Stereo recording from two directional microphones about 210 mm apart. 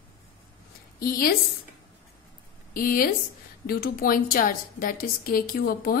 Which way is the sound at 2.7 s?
45° left (ahead or behind).